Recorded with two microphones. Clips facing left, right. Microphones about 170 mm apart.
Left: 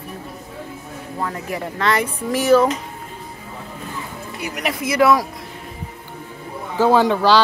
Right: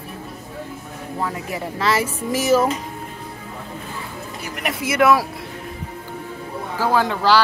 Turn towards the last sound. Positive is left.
turn(degrees=15)  # may be behind; listen again after turning